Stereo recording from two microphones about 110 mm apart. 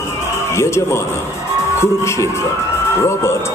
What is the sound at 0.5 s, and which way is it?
Speech, 25° left (ahead or behind).